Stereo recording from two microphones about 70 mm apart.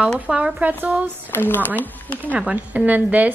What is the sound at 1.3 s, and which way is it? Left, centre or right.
Speech, left.